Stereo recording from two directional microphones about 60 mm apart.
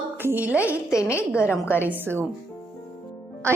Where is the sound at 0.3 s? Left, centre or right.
Right.